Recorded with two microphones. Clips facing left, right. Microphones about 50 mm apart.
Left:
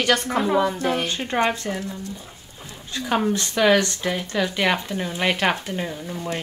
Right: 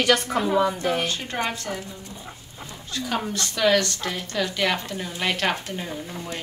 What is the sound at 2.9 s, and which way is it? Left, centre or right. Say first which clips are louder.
A woman's voice: left 5 dB; centre.